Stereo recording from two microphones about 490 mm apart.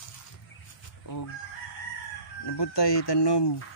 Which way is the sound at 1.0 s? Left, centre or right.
Left.